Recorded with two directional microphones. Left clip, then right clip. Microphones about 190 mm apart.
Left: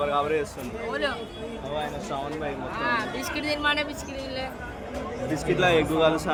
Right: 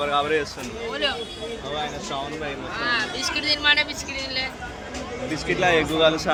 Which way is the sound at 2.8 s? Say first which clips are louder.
Right 3 dB; 55° left (ahead or behind).